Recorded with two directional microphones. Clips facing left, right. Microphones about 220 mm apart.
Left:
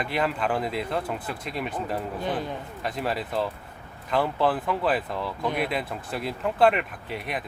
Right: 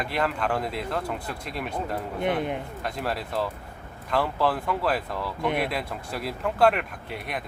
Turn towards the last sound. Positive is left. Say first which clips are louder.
# left 1 dB
turn(degrees=0)  # may be behind; listen again after turning